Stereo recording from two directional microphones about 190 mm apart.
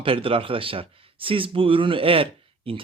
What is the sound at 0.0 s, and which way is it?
Speech, 30° right (ahead or behind).